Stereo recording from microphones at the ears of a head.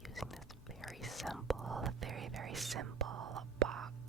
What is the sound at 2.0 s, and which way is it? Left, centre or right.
Whispering, right.